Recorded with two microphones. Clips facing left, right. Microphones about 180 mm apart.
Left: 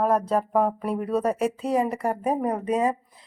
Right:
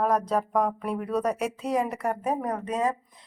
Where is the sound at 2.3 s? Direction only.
10° left (ahead or behind).